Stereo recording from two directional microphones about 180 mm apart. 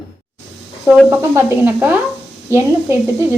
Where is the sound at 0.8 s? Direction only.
Centre (ahead or behind).